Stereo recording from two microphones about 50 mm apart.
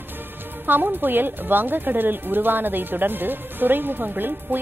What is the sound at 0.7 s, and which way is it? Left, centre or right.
A woman's voice, right.